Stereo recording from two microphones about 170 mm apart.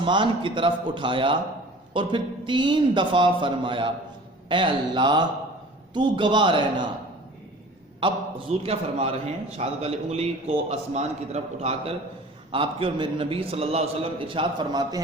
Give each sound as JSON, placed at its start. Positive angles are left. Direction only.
{"t": 0.0, "sound": "a man's voice", "side_deg": -30}
{"t": 8.0, "sound": "a man's voice", "side_deg": -30}